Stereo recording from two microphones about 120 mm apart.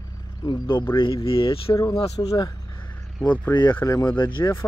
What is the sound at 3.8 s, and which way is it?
Speech, 30° left (ahead or behind).